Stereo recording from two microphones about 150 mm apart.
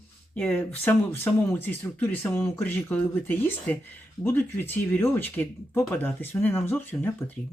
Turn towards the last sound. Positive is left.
turn(degrees=10)  # may be behind; listen again after turning